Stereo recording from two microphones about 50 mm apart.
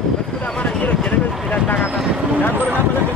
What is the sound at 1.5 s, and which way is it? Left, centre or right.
Speech, left.